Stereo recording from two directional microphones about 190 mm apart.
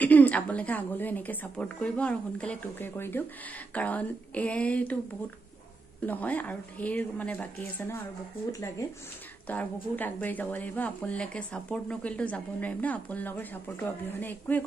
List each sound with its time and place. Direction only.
0.0 s a woman's voice: 10° left (ahead or behind)
6.0 s a woman's voice: 10° left (ahead or behind)